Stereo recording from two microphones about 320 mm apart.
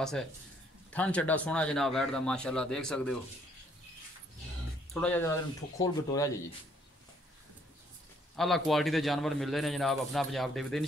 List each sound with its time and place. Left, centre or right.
0.0 s a man's voice: centre
4.9 s a man's voice: centre
8.4 s a man's voice: centre